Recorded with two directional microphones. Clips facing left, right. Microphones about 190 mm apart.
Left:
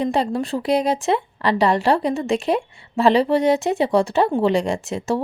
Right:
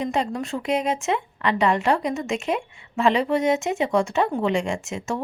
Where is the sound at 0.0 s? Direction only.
35° left (ahead or behind).